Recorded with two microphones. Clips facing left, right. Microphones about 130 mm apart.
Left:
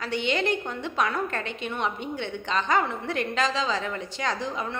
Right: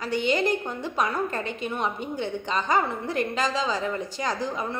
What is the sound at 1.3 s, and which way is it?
Speech, 40° right (ahead or behind).